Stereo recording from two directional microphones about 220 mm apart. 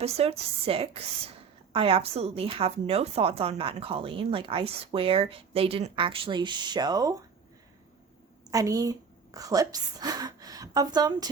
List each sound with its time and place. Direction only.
0.0 s a woman's voice: 30° right (ahead or behind)
8.4 s a woman's voice: 15° right (ahead or behind)